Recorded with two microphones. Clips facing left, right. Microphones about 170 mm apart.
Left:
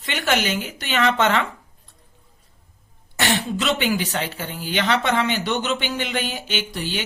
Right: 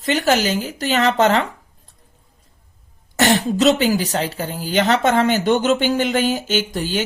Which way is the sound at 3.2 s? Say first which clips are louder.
Right 7 dB; 45° right (ahead or behind).